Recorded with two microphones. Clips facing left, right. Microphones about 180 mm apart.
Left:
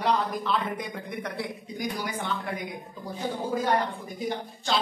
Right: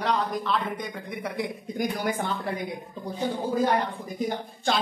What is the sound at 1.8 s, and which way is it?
Speech, 50° right (ahead or behind).